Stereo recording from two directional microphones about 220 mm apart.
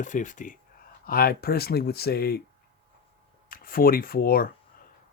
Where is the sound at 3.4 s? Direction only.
40° left (ahead or behind).